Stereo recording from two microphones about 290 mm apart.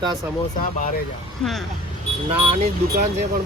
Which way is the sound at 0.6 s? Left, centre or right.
Left.